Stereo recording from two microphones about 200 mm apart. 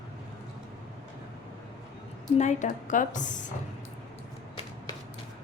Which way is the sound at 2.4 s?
35° left (ahead or behind).